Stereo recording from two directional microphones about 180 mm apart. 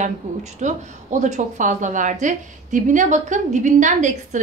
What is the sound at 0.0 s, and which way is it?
A woman's voice, 40° right (ahead or behind).